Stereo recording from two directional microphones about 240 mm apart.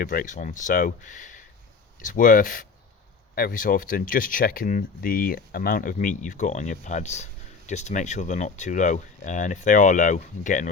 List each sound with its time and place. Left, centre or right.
0.0 s speech: left